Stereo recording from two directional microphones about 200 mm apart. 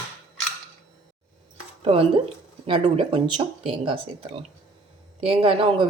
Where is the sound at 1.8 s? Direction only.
30° right (ahead or behind).